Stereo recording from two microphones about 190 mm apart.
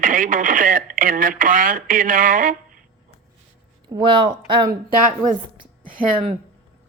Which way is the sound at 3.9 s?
25° right (ahead or behind).